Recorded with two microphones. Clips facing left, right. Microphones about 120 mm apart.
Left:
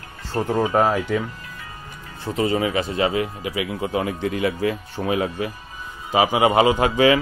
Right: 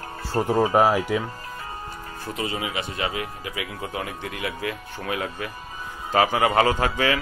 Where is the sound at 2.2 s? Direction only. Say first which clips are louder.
Left 8 dB; 35° left (ahead or behind).